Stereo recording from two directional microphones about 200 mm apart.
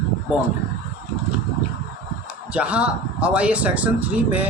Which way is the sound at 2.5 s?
5° right (ahead or behind).